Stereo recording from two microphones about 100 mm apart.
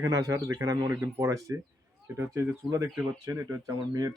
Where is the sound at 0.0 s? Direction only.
35° right (ahead or behind).